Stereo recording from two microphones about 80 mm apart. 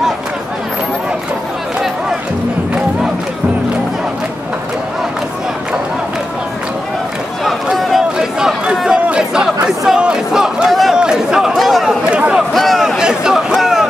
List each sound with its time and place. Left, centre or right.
7.6 s speech: centre
12.1 s speech: centre
12.5 s speech: centre
13.5 s a sound: centre